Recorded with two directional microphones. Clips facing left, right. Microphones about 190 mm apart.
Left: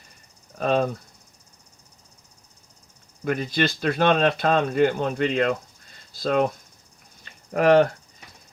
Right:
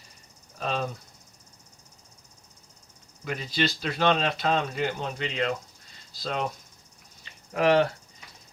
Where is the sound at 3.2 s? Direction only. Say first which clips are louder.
Left 5 dB; 50° left (ahead or behind).